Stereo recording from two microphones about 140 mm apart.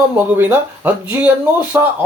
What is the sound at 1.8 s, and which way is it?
Speech, 25° right (ahead or behind).